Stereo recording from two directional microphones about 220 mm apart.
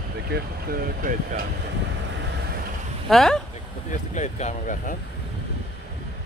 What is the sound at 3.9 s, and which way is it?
Speech, 35° left (ahead or behind).